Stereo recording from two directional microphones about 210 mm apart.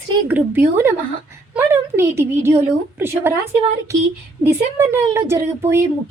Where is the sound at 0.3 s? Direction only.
10° right (ahead or behind).